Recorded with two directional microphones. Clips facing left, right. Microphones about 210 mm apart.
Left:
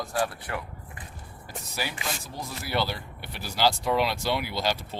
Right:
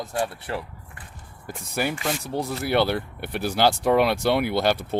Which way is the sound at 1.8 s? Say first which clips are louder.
Right 8 dB; 55° right (ahead or behind).